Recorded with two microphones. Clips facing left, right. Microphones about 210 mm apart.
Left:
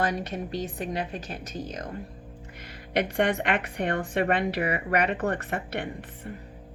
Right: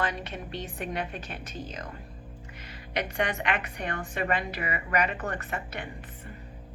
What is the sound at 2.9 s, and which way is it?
A woman's voice, 55° left (ahead or behind).